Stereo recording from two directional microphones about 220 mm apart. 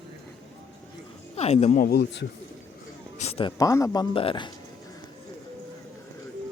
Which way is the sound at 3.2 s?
25° left (ahead or behind).